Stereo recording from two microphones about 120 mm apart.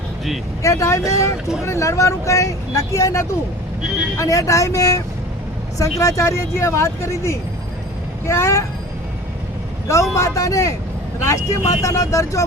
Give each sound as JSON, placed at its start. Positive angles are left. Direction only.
{"t": 0.6, "sound": "speech", "side_deg": 25}
{"t": 9.9, "sound": "speech", "side_deg": 25}